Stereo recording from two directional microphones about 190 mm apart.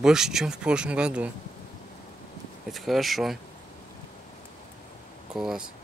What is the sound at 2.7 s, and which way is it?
Speech, centre (ahead or behind).